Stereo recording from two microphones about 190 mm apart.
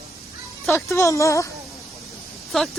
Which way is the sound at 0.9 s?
15° left (ahead or behind).